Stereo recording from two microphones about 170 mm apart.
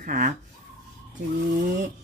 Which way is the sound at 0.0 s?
55° right (ahead or behind).